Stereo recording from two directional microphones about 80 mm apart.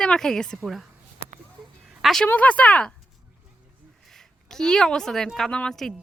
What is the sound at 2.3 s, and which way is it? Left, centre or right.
Speech, centre.